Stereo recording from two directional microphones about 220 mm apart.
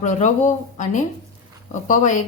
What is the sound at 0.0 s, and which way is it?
A woman's voice, 35° left (ahead or behind).